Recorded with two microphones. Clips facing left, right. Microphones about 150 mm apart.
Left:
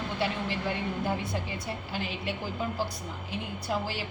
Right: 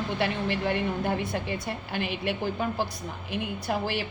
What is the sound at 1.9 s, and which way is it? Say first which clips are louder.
A woman's voice: right 6 dB; 65° right (ahead or behind).